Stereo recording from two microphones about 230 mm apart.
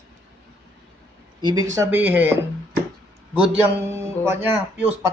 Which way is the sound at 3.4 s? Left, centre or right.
Centre.